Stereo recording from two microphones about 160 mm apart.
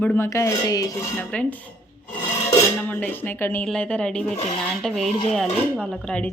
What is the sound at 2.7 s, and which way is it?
A woman's voice, 10° left (ahead or behind).